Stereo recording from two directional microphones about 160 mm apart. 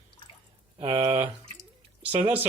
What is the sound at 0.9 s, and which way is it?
Speech, 25° right (ahead or behind).